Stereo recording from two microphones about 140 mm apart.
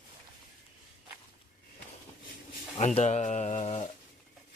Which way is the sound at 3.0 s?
55° left (ahead or behind).